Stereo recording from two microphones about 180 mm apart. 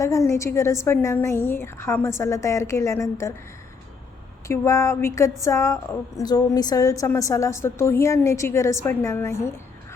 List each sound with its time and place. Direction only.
0.0 s a woman's voice: 15° left (ahead or behind)
4.4 s a woman's voice: 15° left (ahead or behind)